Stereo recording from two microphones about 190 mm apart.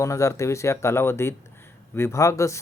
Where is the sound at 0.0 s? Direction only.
15° left (ahead or behind).